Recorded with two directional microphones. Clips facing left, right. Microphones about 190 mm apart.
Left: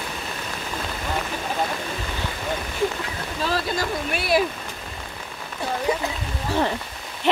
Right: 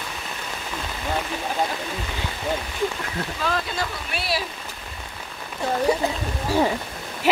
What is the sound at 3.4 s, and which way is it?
Speech, 45° left (ahead or behind).